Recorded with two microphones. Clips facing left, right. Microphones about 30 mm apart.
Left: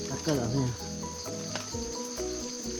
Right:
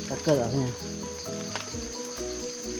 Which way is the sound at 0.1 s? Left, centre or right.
Right.